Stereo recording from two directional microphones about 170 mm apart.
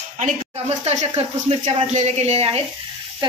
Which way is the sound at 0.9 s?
40° right (ahead or behind).